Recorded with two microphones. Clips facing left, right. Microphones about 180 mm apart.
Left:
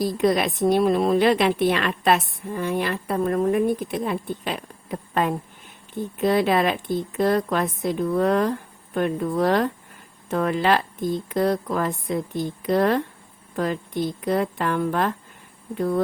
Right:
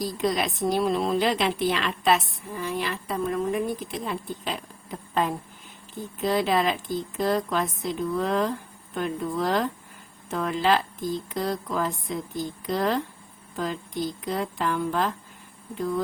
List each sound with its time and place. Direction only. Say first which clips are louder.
0.0 s a woman's voice: left 5 dB; 60° left (ahead or behind)